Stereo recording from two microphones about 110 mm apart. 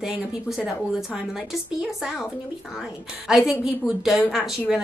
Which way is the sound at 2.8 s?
5° right (ahead or behind).